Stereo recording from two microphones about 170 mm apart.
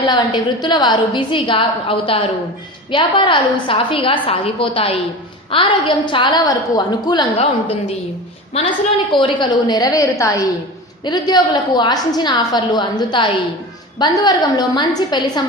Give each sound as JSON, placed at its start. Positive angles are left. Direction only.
{"t": 0.6, "sound": "a woman's voice", "side_deg": 25}